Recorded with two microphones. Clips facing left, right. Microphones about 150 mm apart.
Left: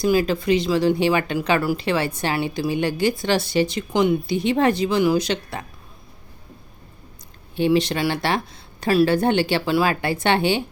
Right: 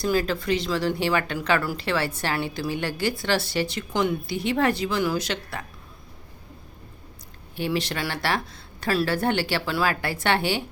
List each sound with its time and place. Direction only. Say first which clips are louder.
0.0 s speech: left 5 dB; 15° left (ahead or behind)
7.5 s speech: left 8 dB; 20° left (ahead or behind)